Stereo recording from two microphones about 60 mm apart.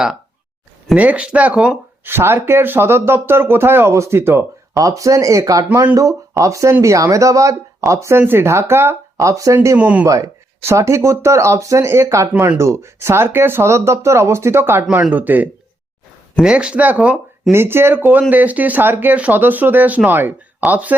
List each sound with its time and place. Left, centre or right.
0.9 s speech: right
2.0 s speech: right
3.9 s speech: right
4.2 s speech: right
4.8 s speech: right
8.2 s speech: right
9.1 s speech: right
9.7 s speech: right
10.7 s speech: right
11.9 s speech: right
15.1 s speech: right
16.4 s speech: centre
17.5 s speech: right